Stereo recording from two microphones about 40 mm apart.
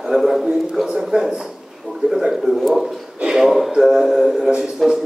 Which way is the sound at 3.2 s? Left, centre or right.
Centre.